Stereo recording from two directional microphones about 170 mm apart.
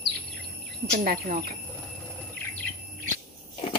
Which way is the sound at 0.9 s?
60° right (ahead or behind).